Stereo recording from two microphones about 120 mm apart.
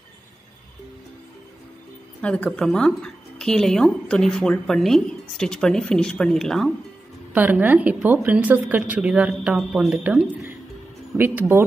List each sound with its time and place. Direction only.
2.2 s speech: 10° left (ahead or behind)
7.3 s a woman's voice: 15° right (ahead or behind)
11.1 s a woman's voice: 15° right (ahead or behind)